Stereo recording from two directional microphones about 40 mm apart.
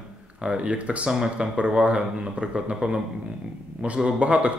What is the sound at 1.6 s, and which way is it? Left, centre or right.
A man's voice, right.